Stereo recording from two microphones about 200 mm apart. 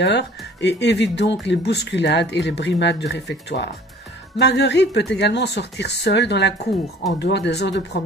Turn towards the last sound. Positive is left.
turn(degrees=60)  # may be behind; listen again after turning